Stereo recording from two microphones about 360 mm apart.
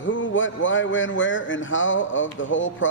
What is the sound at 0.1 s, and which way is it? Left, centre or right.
A man's voice, left.